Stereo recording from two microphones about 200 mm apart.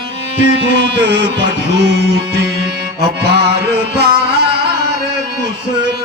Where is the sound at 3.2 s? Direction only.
55° right (ahead or behind).